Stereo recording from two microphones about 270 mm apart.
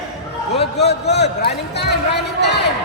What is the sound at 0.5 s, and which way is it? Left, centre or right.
A man's voice, left.